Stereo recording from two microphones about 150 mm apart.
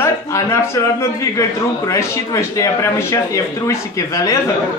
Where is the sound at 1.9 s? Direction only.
20° left (ahead or behind).